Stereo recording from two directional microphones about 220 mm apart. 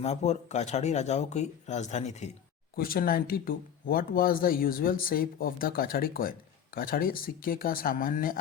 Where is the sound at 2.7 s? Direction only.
40° left (ahead or behind).